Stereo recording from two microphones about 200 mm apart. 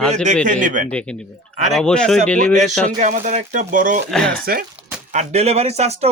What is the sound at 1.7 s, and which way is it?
Speech, 5° left (ahead or behind).